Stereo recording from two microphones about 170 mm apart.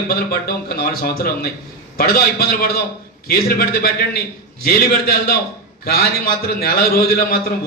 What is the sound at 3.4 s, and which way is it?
A man's voice, 60° left (ahead or behind).